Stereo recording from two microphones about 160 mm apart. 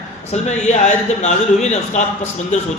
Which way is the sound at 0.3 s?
45° left (ahead or behind).